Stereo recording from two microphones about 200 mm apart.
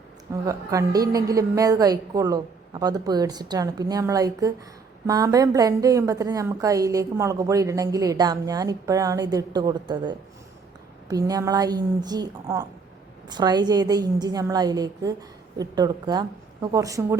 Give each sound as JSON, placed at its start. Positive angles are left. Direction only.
{"t": 0.4, "sound": "a woman's voice", "side_deg": -15}